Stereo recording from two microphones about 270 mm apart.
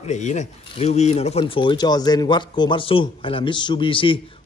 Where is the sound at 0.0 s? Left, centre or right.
Left.